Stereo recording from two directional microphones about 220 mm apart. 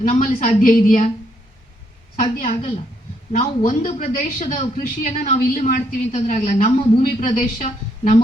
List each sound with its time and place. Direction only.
0.1 s a man's voice: 35° left (ahead or behind)
2.5 s a woman's voice: 25° left (ahead or behind)